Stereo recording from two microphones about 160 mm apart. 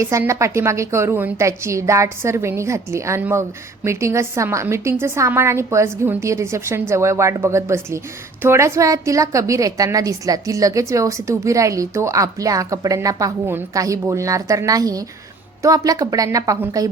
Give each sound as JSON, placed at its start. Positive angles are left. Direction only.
{"t": 0.0, "sound": "a woman's voice", "side_deg": -20}